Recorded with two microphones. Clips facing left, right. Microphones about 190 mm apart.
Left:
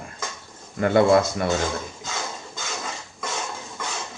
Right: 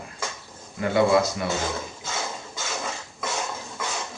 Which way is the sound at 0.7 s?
55° left (ahead or behind).